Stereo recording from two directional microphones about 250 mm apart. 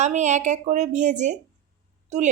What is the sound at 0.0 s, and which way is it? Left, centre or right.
A woman's voice, right.